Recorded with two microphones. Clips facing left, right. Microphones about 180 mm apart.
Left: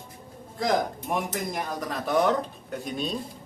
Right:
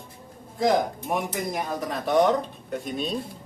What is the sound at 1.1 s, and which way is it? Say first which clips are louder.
Speech: right 1 dB; 5° right (ahead or behind).